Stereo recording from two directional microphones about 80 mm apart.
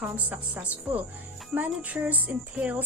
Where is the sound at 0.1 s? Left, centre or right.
Right.